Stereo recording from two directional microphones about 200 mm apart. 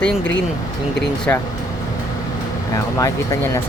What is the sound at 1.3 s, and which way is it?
Speech, 10° left (ahead or behind).